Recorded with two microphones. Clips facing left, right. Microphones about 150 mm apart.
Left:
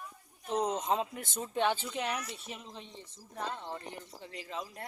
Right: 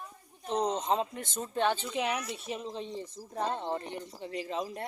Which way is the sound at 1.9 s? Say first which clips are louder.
Right 4 dB; 5° right (ahead or behind).